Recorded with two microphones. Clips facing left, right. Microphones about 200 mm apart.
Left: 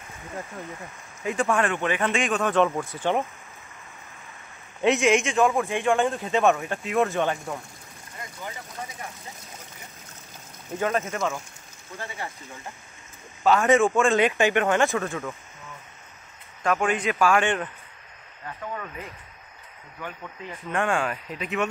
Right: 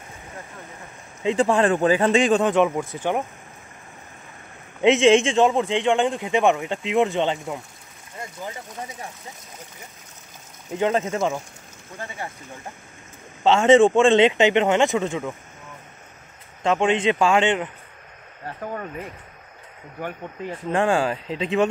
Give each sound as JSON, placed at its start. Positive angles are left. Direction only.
{"t": 0.6, "sound": "speech", "side_deg": 15}
{"t": 1.2, "sound": "speech", "side_deg": -25}
{"t": 2.4, "sound": "speech", "side_deg": -15}
{"t": 4.7, "sound": "speech", "side_deg": -20}
{"t": 5.7, "sound": "speech", "side_deg": -15}
{"t": 11.1, "sound": "speech", "side_deg": -30}
{"t": 11.9, "sound": "speech", "side_deg": -15}
{"t": 16.6, "sound": "speech", "side_deg": -25}
{"t": 18.4, "sound": "speech", "side_deg": -40}
{"t": 20.0, "sound": "speech", "side_deg": -45}
{"t": 20.7, "sound": "speech", "side_deg": -30}